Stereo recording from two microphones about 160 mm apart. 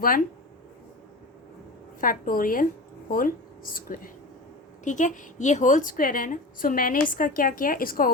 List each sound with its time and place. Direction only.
2.0 s a woman's voice: 60° left (ahead or behind)